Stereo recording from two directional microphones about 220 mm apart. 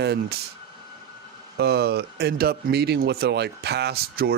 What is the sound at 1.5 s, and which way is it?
Speech, 45° right (ahead or behind).